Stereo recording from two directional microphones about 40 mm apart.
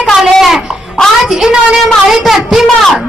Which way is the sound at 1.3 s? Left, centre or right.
Centre.